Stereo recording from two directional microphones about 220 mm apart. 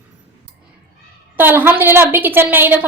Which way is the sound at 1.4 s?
10° right (ahead or behind).